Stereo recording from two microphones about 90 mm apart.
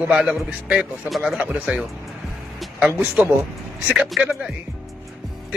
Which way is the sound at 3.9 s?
10° right (ahead or behind).